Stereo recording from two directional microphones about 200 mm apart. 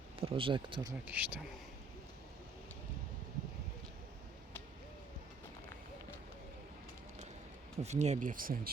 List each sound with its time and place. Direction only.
0.2 s speech: 25° right (ahead or behind)
1.0 s speech: 10° right (ahead or behind)
7.8 s speech: 35° right (ahead or behind)